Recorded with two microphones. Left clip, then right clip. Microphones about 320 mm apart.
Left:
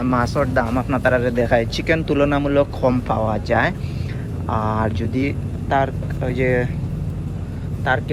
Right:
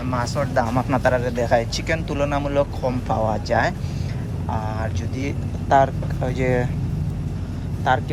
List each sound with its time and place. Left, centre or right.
0.0 s speech: centre
7.9 s speech: centre